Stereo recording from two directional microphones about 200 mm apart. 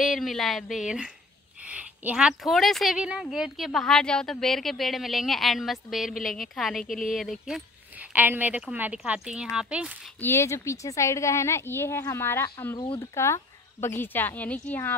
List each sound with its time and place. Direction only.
0.0 s a woman's voice: centre (ahead or behind)
10.2 s a woman's voice: 15° left (ahead or behind)